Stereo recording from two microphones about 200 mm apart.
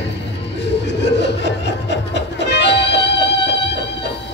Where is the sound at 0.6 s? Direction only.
60° left (ahead or behind).